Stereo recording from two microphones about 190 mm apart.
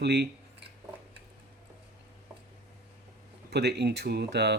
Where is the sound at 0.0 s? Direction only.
60° right (ahead or behind).